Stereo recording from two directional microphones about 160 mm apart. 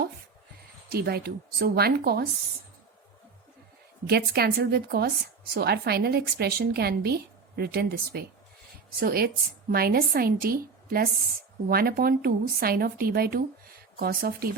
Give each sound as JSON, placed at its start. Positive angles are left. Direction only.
{"t": 0.9, "sound": "a woman's voice", "side_deg": -75}
{"t": 4.0, "sound": "a woman's voice", "side_deg": -80}
{"t": 9.0, "sound": "a woman's voice", "side_deg": -65}